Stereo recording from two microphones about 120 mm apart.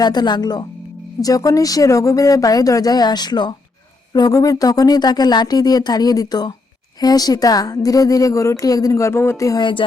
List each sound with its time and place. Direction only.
0.0 s a woman's voice: 35° left (ahead or behind)